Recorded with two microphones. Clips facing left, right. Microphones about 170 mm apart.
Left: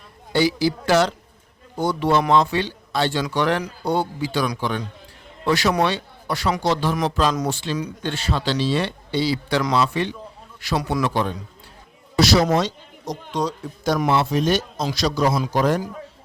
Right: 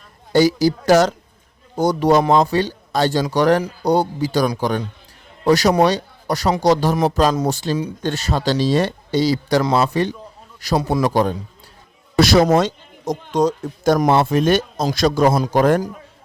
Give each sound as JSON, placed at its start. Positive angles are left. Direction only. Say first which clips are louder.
{"t": 0.3, "sound": "a man's voice", "louder": "right 5 dB", "side_deg": -40}
{"t": 12.1, "sound": "a man's voice", "louder": "right 4 dB", "side_deg": -50}